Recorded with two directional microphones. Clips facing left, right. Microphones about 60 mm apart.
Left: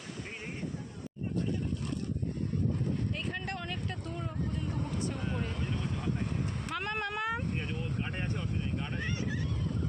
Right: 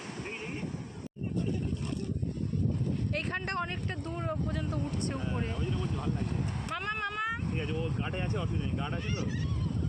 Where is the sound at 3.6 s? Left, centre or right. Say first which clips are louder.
Right 3 dB; right.